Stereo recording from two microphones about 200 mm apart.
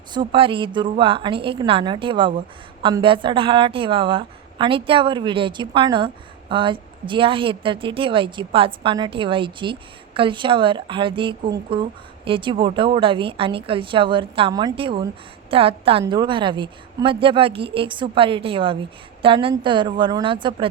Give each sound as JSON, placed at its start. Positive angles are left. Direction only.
{"t": 0.1, "sound": "speech", "side_deg": -25}